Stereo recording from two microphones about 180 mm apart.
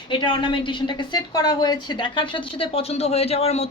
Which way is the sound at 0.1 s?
25° left (ahead or behind).